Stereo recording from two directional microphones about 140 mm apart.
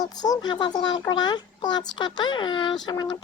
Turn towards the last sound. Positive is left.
turn(degrees=35)  # may be behind; listen again after turning